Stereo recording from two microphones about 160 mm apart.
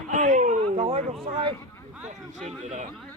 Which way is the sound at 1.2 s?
35° right (ahead or behind).